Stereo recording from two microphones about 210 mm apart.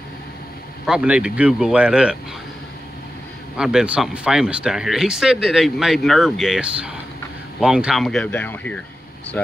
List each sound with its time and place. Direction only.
0.8 s speech: 5° right (ahead or behind)
3.5 s speech: 5° right (ahead or behind)